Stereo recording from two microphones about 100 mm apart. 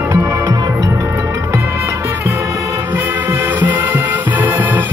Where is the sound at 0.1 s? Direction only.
30° right (ahead or behind).